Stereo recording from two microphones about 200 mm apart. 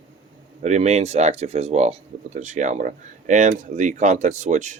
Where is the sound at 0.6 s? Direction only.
35° right (ahead or behind).